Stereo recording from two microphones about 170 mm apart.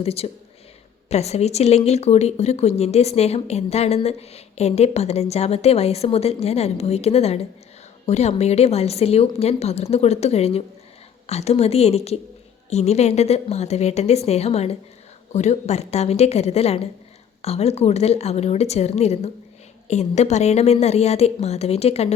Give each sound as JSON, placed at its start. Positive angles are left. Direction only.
{"t": 0.0, "sound": "speech", "side_deg": 35}